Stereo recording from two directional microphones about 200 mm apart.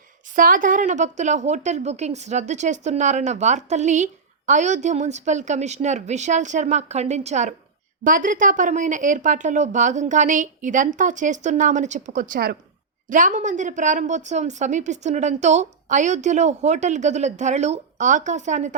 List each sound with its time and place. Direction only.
0.3 s a woman's voice: 40° right (ahead or behind)